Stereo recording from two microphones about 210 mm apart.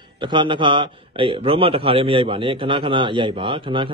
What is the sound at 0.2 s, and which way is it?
A man's voice, 20° right (ahead or behind).